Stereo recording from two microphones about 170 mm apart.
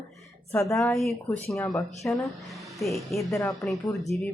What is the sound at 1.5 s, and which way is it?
Speech, 20° left (ahead or behind).